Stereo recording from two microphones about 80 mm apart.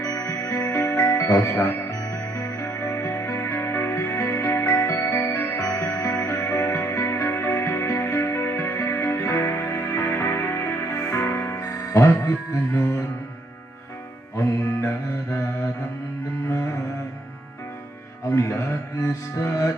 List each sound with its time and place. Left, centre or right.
0.0 s music: left
5.5 s music: left
14.6 s music: left
18.3 s music: left